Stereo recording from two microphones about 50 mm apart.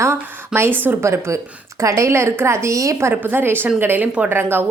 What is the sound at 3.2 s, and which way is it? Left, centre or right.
A woman's voice, right.